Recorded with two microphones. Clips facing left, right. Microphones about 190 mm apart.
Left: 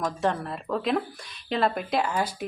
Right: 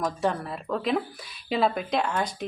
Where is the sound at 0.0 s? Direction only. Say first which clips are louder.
Even; centre (ahead or behind).